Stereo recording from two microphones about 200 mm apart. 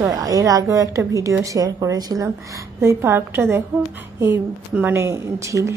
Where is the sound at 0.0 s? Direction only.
15° right (ahead or behind).